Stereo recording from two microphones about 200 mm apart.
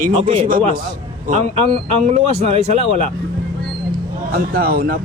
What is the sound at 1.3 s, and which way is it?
Speech, 30° right (ahead or behind).